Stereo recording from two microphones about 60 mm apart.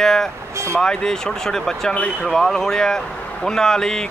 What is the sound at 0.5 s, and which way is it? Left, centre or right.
Speech, right.